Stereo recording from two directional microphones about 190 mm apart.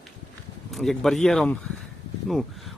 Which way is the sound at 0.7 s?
Centre (ahead or behind).